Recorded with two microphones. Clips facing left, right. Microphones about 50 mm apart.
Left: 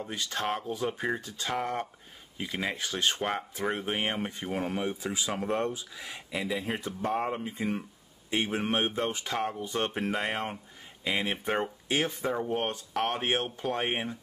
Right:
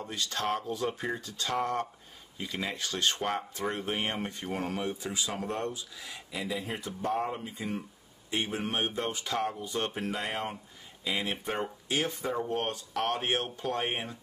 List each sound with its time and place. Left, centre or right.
0.1 s speech: left
5.7 s a man's voice: left
12.3 s speech: centre